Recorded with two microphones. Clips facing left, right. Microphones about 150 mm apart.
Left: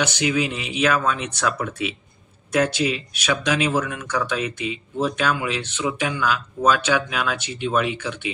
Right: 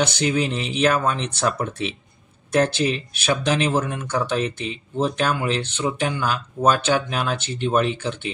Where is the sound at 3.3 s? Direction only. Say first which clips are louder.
Right 1 dB; 30° right (ahead or behind).